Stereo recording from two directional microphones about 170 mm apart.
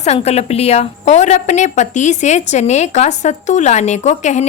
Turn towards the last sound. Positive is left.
turn(degrees=45)  # may be behind; listen again after turning